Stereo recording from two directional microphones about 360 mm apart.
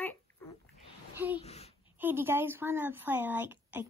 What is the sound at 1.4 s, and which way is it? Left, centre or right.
Speech, centre.